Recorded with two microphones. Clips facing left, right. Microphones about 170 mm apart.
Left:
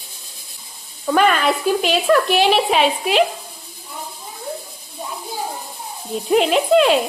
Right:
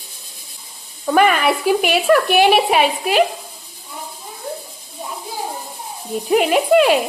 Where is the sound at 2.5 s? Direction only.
5° right (ahead or behind).